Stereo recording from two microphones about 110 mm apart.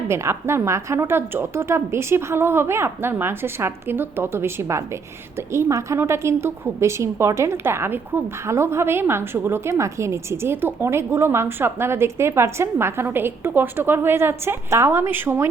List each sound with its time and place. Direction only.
0.1 s a woman's voice: 25° right (ahead or behind)